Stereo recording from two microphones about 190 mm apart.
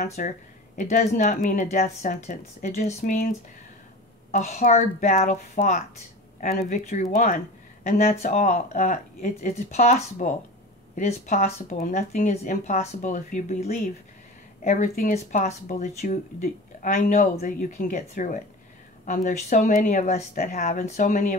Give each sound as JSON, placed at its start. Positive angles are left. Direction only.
{"t": 0.0, "sound": "a woman's voice", "side_deg": 35}